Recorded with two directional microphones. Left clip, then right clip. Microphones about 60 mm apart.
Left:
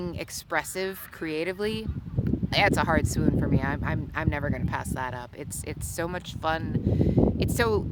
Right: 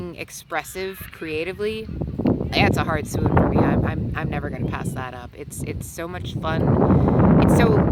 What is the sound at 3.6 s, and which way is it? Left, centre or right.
Speech, left.